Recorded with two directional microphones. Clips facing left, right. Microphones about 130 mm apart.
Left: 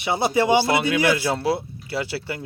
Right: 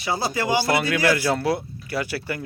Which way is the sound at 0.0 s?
20° left (ahead or behind).